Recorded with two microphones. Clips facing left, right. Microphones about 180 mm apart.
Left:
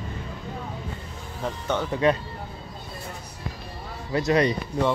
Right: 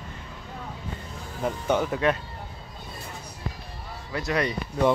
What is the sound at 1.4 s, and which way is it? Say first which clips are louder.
Speech: right 3 dB; 10° right (ahead or behind).